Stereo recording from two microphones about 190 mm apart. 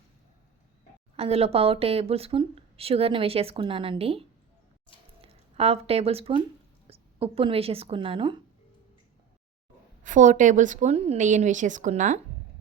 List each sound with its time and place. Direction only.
1.1 s speech: 30° right (ahead or behind)
10.0 s speech: 40° right (ahead or behind)